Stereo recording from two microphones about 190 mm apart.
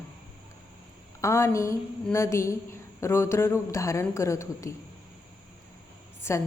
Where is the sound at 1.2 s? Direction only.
15° left (ahead or behind).